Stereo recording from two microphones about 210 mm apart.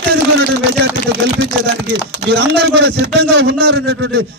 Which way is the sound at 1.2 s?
55° right (ahead or behind).